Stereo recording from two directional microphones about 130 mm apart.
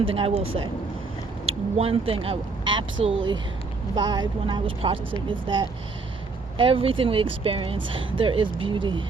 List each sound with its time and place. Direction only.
0.0 s speech: 45° right (ahead or behind)